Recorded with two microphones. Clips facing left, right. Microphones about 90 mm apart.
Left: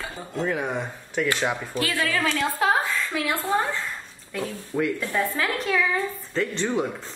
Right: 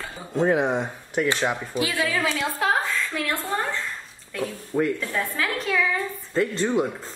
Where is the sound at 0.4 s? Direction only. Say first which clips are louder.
Right 5 dB; 25° right (ahead or behind); by 3.5 s 5° left (ahead or behind).